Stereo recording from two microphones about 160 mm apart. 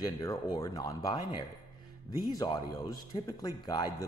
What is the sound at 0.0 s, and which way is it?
Speech, 25° left (ahead or behind).